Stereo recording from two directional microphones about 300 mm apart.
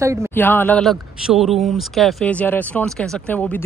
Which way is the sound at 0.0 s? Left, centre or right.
Centre.